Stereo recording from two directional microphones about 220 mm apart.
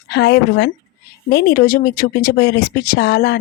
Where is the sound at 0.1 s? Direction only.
50° left (ahead or behind).